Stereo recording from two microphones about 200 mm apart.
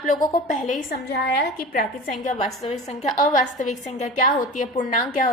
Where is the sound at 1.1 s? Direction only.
50° left (ahead or behind).